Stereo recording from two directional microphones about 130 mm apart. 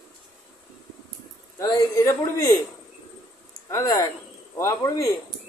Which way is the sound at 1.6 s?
25° left (ahead or behind).